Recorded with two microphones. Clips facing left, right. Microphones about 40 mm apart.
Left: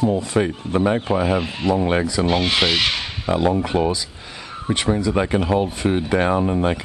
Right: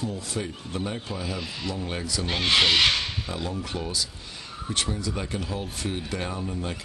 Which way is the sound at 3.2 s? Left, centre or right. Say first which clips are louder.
Left 13 dB; left.